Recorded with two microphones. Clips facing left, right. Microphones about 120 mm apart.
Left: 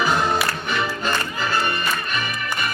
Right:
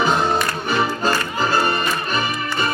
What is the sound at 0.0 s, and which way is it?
Music, 25° right (ahead or behind).